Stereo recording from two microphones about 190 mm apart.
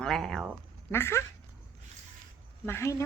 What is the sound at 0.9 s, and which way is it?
Speech, 15° left (ahead or behind).